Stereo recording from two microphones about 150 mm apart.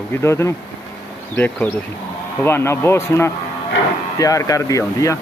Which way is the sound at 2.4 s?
15° left (ahead or behind).